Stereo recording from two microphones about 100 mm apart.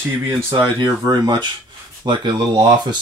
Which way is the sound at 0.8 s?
45° right (ahead or behind).